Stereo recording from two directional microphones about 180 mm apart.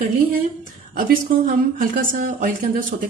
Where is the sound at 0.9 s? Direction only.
50° right (ahead or behind).